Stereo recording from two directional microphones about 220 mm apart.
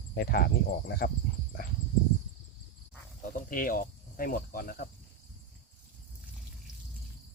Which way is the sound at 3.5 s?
40° left (ahead or behind).